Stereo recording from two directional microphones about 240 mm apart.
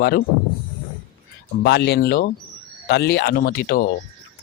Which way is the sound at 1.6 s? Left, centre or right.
Left.